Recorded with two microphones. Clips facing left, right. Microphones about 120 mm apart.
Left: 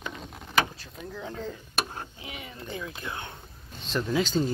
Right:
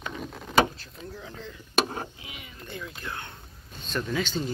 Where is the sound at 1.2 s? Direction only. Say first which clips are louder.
Left 6 dB; 45° left (ahead or behind).